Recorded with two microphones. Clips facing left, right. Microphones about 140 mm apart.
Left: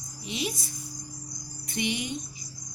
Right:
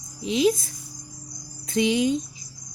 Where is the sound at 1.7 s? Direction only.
90° right.